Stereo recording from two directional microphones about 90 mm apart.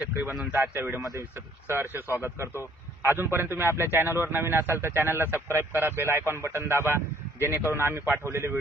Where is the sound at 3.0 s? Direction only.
25° right (ahead or behind).